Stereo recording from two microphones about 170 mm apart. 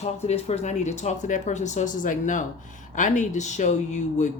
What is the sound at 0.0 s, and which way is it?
Speech, 40° left (ahead or behind).